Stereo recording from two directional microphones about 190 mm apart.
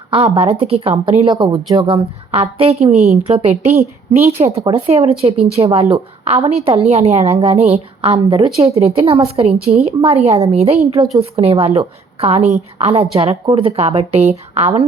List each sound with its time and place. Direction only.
0.1 s a woman's voice: 30° right (ahead or behind)
3.7 s a woman's voice: 15° right (ahead or behind)
4.4 s a woman's voice: 30° right (ahead or behind)